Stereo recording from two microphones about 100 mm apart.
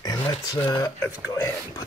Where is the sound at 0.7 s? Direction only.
40° left (ahead or behind).